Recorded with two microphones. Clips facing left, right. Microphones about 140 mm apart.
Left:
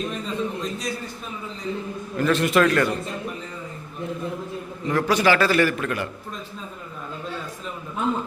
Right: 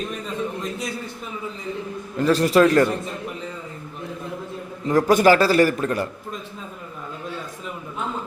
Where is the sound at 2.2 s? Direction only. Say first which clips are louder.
Right 3 dB; 35° right (ahead or behind).